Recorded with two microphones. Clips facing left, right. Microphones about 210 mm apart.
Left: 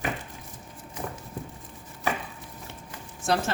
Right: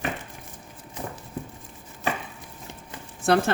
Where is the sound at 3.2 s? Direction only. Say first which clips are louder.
Right 5 dB; 60° right (ahead or behind).